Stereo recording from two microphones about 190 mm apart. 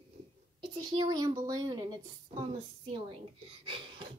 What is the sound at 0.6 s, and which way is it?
A woman's voice, 20° right (ahead or behind).